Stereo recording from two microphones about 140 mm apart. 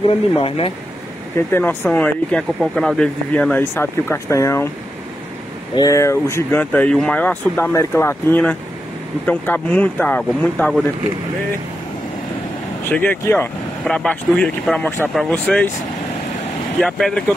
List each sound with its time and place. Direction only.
0.4 s speech: 40° left (ahead or behind)
1.5 s speech: 15° left (ahead or behind)
5.8 s speech: 20° left (ahead or behind)
12.8 s speech: 15° left (ahead or behind)
16.8 s speech: 5° left (ahead or behind)